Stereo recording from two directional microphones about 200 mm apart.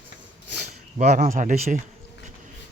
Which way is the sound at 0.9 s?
35° right (ahead or behind).